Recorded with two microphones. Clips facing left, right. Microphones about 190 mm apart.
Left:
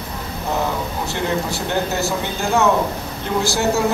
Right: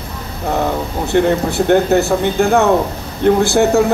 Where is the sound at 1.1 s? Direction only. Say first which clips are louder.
Right 11 dB; 60° right (ahead or behind).